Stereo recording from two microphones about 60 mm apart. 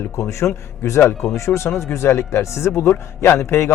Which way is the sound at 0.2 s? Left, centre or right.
Left.